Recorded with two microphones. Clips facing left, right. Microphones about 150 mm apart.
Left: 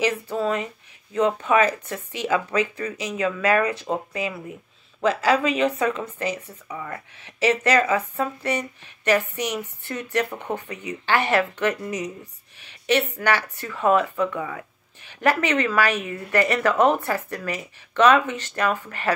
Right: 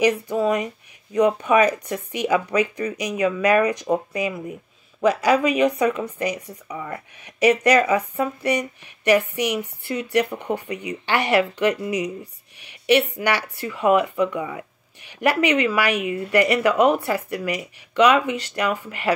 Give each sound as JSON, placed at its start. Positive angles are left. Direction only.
{"t": 0.0, "sound": "speech", "side_deg": -15}
{"t": 12.5, "sound": "a sound", "side_deg": -15}
{"t": 13.1, "sound": "speech", "side_deg": -15}